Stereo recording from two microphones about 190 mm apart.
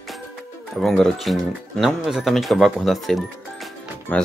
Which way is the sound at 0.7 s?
Centre (ahead or behind).